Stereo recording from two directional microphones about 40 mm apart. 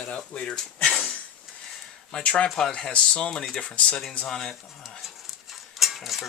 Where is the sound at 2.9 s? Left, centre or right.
Left.